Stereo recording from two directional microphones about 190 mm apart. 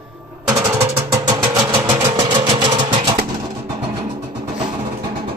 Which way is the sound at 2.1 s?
25° right (ahead or behind).